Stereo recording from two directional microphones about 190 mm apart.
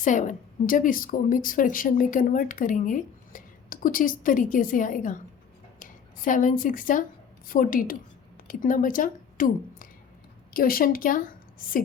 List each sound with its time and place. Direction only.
0.0 s a woman's voice: 40° left (ahead or behind)